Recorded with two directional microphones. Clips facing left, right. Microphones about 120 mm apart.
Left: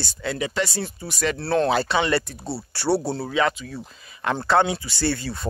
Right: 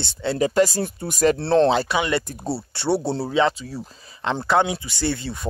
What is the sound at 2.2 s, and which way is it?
Speech, 45° right (ahead or behind).